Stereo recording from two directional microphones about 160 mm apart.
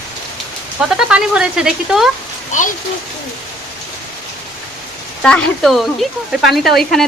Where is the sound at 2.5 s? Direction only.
50° left (ahead or behind).